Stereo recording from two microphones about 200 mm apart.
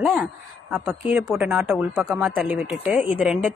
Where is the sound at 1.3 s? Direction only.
10° right (ahead or behind).